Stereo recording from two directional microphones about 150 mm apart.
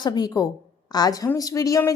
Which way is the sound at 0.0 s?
25° left (ahead or behind).